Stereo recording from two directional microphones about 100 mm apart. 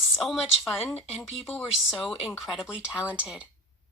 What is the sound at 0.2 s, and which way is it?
Speech, centre (ahead or behind).